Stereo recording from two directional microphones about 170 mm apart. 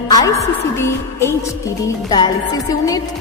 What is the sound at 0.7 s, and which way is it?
Speech, 15° left (ahead or behind).